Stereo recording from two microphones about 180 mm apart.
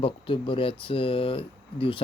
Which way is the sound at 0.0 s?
30° left (ahead or behind).